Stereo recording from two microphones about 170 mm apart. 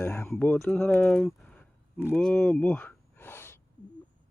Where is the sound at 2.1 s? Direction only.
5° left (ahead or behind).